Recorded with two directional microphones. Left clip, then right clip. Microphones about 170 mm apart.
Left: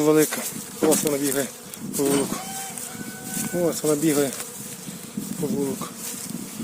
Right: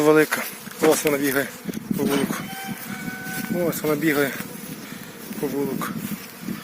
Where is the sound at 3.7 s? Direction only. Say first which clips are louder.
Even; centre (ahead or behind).